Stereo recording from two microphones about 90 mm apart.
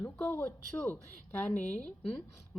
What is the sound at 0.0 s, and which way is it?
A woman's voice, 15° left (ahead or behind).